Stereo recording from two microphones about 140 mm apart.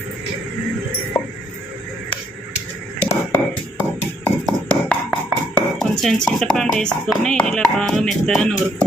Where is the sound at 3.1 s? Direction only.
20° left (ahead or behind).